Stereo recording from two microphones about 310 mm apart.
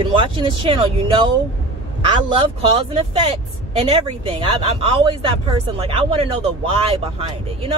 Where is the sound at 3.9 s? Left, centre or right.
Centre.